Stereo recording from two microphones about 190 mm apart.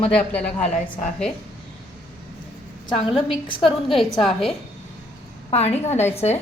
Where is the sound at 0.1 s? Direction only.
5° left (ahead or behind).